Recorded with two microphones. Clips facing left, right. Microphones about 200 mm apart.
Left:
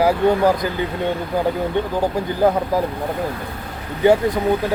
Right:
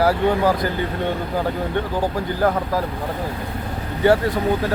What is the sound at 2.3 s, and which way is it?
Speech, 20° left (ahead or behind).